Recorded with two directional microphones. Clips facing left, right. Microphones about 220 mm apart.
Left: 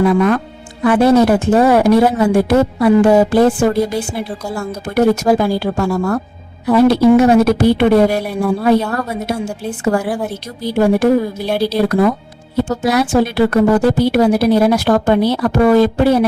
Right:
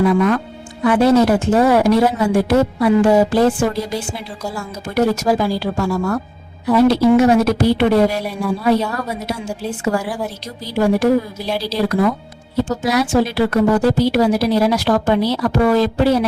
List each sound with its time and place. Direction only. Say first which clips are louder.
0.9 s speech: left 2 dB; 55° left (ahead or behind)